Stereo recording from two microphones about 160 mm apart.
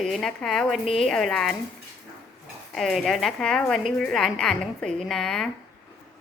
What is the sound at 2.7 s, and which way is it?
A woman's voice, centre (ahead or behind).